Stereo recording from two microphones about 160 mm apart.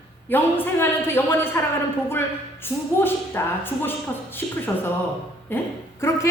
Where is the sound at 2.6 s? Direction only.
15° left (ahead or behind).